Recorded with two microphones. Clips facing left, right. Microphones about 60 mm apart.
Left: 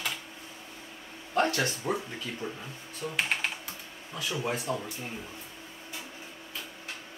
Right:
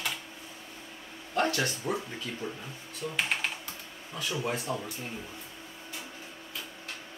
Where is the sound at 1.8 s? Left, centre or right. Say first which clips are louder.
Left 1 dB; centre.